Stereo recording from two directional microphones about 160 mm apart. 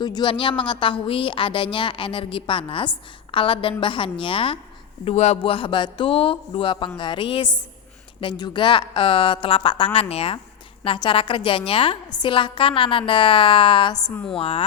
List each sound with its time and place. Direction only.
0.0 s a woman's voice: 25° left (ahead or behind)